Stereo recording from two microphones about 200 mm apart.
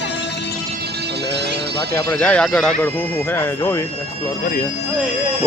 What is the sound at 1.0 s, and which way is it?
Music, 55° right (ahead or behind).